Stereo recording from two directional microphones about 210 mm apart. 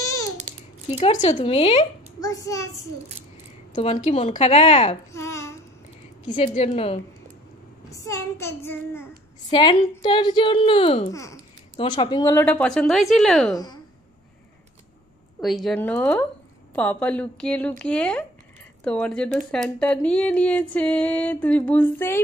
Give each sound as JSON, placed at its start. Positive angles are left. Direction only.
{"t": 0.5, "sound": "a sound", "side_deg": -35}
{"t": 0.9, "sound": "a woman's voice", "side_deg": 30}
{"t": 2.1, "sound": "a child's voice", "side_deg": 15}
{"t": 3.7, "sound": "a woman's voice", "side_deg": 30}
{"t": 5.1, "sound": "babbling", "side_deg": 15}
{"t": 6.4, "sound": "a woman's voice", "side_deg": 30}
{"t": 7.9, "sound": "a child's voice", "side_deg": 15}
{"t": 15.4, "sound": "a child's voice", "side_deg": 0}